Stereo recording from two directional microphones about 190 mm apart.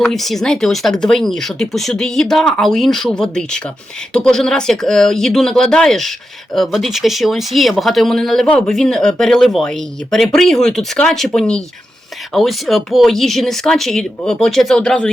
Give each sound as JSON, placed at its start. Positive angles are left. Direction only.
{"t": 0.0, "sound": "speech", "side_deg": 0}